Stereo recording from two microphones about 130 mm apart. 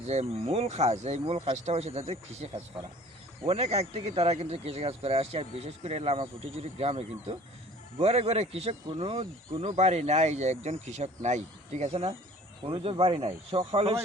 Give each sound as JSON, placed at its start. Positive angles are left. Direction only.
{"t": 0.0, "sound": "speech", "side_deg": -55}